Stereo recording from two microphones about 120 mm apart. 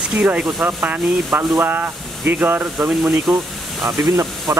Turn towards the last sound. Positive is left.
turn(degrees=-25)  # may be behind; listen again after turning